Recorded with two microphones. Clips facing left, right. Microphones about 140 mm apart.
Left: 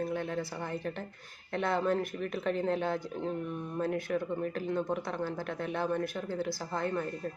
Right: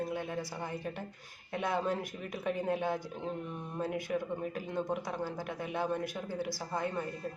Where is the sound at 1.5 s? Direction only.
15° right (ahead or behind).